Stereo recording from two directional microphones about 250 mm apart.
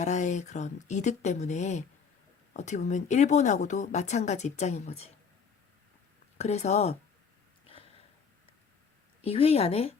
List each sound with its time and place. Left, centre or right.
0.0 s speech: left
6.3 s speech: left
9.2 s speech: left